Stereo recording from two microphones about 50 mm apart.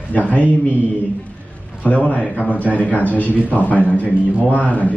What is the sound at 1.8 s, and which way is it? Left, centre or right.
A man's voice, left.